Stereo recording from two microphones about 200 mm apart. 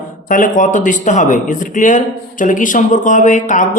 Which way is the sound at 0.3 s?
40° left (ahead or behind).